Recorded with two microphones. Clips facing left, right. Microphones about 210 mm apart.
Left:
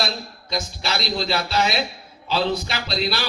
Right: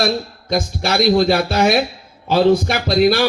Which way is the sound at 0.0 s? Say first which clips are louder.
Right 9 dB; 50° right (ahead or behind).